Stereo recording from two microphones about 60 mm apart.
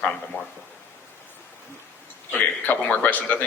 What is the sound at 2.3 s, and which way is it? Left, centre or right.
A man's voice, left.